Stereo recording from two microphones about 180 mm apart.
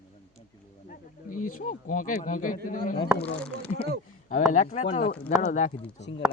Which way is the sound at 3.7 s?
35° left (ahead or behind).